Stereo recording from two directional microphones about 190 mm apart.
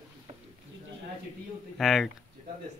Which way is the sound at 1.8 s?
Centre (ahead or behind).